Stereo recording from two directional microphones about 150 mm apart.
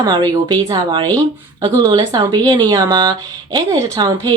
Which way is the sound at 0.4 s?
30° right (ahead or behind).